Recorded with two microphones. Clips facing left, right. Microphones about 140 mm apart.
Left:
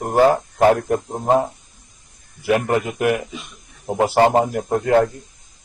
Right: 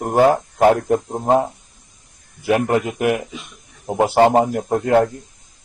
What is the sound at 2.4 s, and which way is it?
Speech, 20° right (ahead or behind).